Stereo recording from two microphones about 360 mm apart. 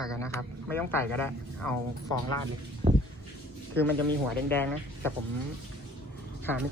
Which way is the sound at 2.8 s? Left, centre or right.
Centre.